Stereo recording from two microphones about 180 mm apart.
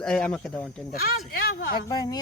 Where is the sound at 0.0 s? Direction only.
5° left (ahead or behind).